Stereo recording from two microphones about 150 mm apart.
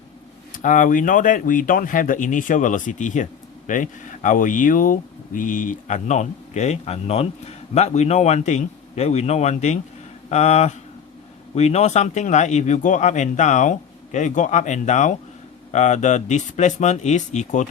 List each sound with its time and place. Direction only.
0.5 s speech: 60° left (ahead or behind)